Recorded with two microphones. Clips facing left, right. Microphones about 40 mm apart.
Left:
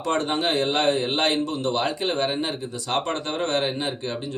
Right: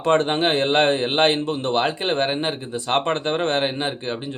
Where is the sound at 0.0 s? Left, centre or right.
Right.